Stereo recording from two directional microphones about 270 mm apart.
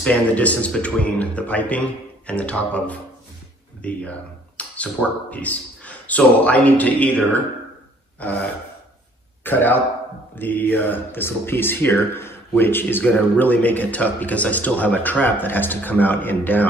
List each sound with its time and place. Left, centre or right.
0.0 s speech: centre
3.8 s a sound: centre
5.3 s a man's voice: centre